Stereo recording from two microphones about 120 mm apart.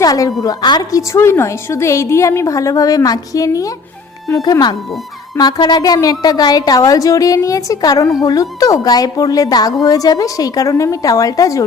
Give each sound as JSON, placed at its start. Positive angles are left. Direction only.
{"t": 0.0, "sound": "a woman's voice", "side_deg": 30}